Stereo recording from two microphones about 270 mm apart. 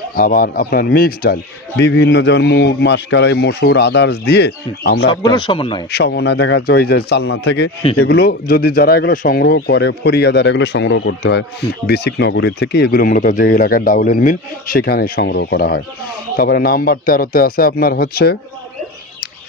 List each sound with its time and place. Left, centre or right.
0.1 s speech: left
5.2 s speech: centre
5.9 s speech: left